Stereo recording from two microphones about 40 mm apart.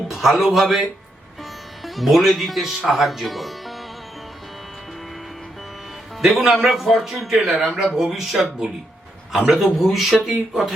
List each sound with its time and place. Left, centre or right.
0.1 s speech: centre
1.8 s speech: centre
6.2 s a man's voice: centre
7.5 s speech: centre
7.9 s a man's voice: centre